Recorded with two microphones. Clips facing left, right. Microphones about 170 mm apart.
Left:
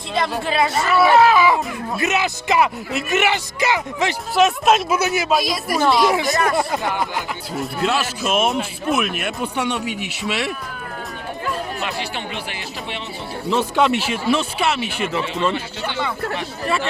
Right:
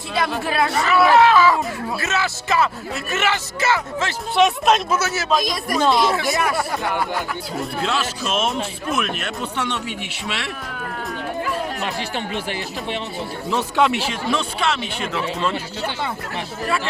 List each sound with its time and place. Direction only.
0.1 s a man's voice: 5° right (ahead or behind); by 4.1 s 15° left (ahead or behind)
4.4 s speech: centre (ahead or behind)
4.9 s a man's voice: 15° left (ahead or behind); by 6.6 s centre (ahead or behind)
7.8 s a man's voice: 10° left (ahead or behind)
11.9 s speech: 45° right (ahead or behind)
13.5 s speech: centre (ahead or behind)